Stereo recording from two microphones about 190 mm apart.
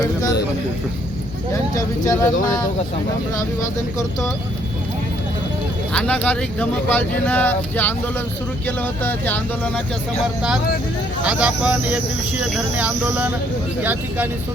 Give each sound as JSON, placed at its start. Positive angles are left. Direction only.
{"t": 0.0, "sound": "speech", "side_deg": 20}
{"t": 1.7, "sound": "speech", "side_deg": 15}
{"t": 5.9, "sound": "speech", "side_deg": 5}
{"t": 11.2, "sound": "speech", "side_deg": -5}
{"t": 12.5, "sound": "cricket", "side_deg": -5}